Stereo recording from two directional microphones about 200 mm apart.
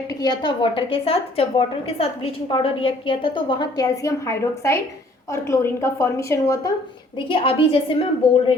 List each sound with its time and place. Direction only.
0.1 s a woman's voice: 20° left (ahead or behind)